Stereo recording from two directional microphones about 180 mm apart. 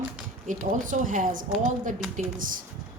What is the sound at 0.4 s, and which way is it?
A woman's voice, 45° right (ahead or behind).